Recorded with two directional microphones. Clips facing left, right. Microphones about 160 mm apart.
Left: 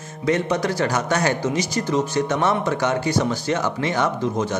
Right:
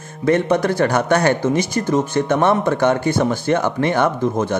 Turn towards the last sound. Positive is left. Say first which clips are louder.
# right 4 dB
turn(degrees=-55)  # may be behind; listen again after turning